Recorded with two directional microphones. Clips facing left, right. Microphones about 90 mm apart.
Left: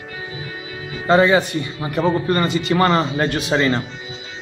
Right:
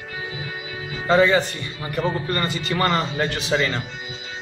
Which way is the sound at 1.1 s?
15° left (ahead or behind).